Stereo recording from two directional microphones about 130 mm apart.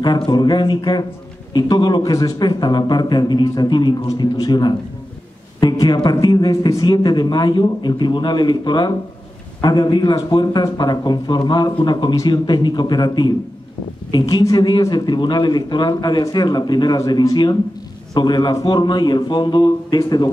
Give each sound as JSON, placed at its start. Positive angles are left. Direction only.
{"t": 0.0, "sound": "speech", "side_deg": 35}
{"t": 5.6, "sound": "a sound", "side_deg": 30}
{"t": 6.0, "sound": "speech", "side_deg": 30}